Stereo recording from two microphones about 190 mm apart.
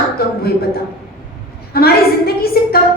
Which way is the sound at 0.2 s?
55° left (ahead or behind).